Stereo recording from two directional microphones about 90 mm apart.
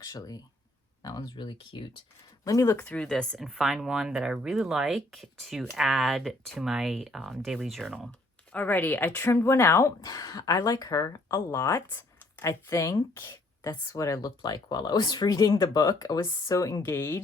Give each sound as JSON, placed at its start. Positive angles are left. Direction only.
{"t": 0.0, "sound": "speech", "side_deg": 45}
{"t": 1.3, "sound": "speech", "side_deg": 60}
{"t": 2.4, "sound": "speech", "side_deg": 35}
{"t": 2.7, "sound": "speech", "side_deg": 15}
{"t": 8.5, "sound": "speech", "side_deg": 20}
{"t": 10.0, "sound": "speech", "side_deg": 45}
{"t": 16.6, "sound": "speech", "side_deg": 40}
{"t": 16.9, "sound": "speech", "side_deg": 25}